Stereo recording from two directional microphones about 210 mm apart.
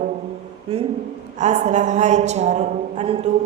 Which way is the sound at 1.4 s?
35° right (ahead or behind).